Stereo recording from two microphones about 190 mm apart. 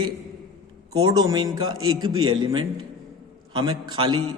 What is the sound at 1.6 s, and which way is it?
Speech, 90° right.